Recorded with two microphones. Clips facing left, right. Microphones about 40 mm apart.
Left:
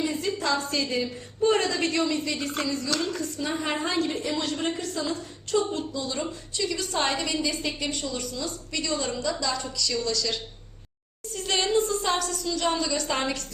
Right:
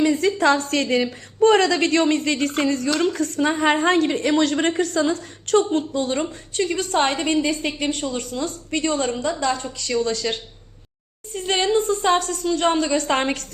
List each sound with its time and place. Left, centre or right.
0.0 s a woman's voice: right
5.9 s a woman's voice: right